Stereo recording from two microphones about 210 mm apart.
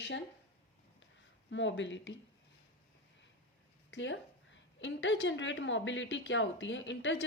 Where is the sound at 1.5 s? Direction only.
60° left (ahead or behind).